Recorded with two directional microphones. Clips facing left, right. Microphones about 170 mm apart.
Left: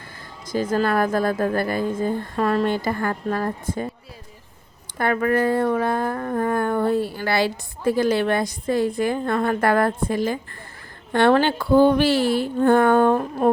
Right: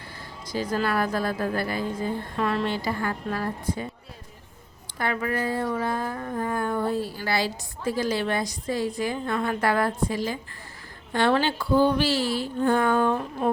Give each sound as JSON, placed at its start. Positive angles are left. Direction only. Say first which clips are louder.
{"t": 0.5, "sound": "a woman's voice", "louder": "left 5 dB", "side_deg": 50}
{"t": 4.9, "sound": "a sound", "louder": "left 7 dB", "side_deg": 50}
{"t": 11.1, "sound": "a woman's voice", "louder": "left 5 dB", "side_deg": 55}